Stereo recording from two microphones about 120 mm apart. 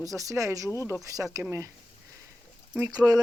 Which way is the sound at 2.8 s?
30° right (ahead or behind).